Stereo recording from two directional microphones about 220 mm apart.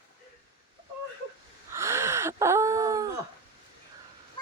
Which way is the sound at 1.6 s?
10° right (ahead or behind).